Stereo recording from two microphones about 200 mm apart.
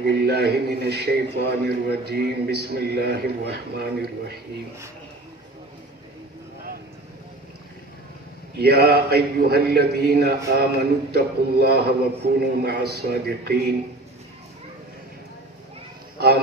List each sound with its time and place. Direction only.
0.1 s a man's voice: 55° right (ahead or behind)
8.5 s a man's voice: 55° right (ahead or behind)